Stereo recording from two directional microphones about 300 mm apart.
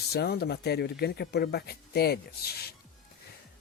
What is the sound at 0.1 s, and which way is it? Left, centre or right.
Speech, left.